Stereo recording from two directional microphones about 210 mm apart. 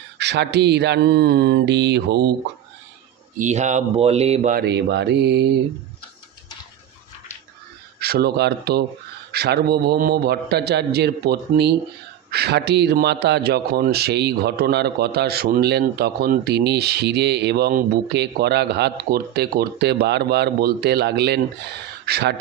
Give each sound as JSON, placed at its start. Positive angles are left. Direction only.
{"t": 0.2, "sound": "speech", "side_deg": -55}
{"t": 3.3, "sound": "speech", "side_deg": -35}
{"t": 4.5, "sound": "speech", "side_deg": -55}
{"t": 7.9, "sound": "speech", "side_deg": -50}